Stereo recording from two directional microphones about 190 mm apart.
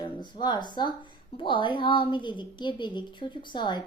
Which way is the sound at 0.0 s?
25° left (ahead or behind).